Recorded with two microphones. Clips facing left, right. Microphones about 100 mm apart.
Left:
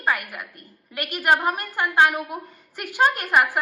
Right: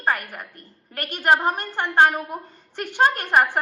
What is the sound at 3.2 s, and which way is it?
Speech, 35° right (ahead or behind).